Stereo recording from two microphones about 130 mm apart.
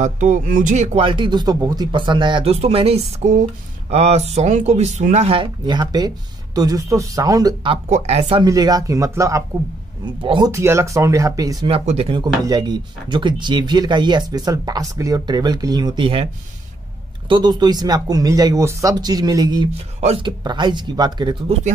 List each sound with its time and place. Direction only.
0.0 s speech: 70° right (ahead or behind)
0.9 s speech: 40° right (ahead or behind); by 5.3 s 65° right (ahead or behind)
5.3 s speech: 35° right (ahead or behind)
7.9 s speech: 60° right (ahead or behind)
8.4 s speech: 30° right (ahead or behind)
10.2 s speech: 40° right (ahead or behind)
10.5 s speech: 20° right (ahead or behind)
11.8 s speech: 60° right (ahead or behind)
12.1 s speech: 35° right (ahead or behind)
17.3 s speech: 35° right (ahead or behind)
20.0 s speech: 55° right (ahead or behind)
20.2 s speech: 35° right (ahead or behind)